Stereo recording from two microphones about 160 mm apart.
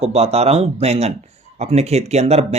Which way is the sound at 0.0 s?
40° right (ahead or behind).